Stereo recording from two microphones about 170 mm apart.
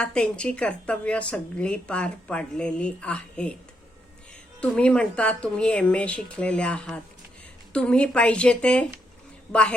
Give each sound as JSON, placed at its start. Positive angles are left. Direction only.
{"t": 0.0, "sound": "a woman's voice", "side_deg": 5}
{"t": 4.6, "sound": "a woman's voice", "side_deg": 5}